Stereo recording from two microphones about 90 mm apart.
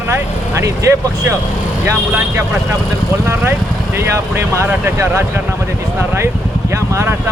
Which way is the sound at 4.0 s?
30° right (ahead or behind).